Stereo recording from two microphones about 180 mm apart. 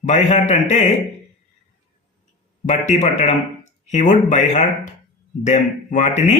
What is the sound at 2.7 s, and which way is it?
Speech, 40° left (ahead or behind).